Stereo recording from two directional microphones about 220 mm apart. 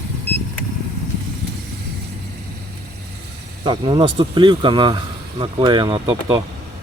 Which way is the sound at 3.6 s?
20° right (ahead or behind).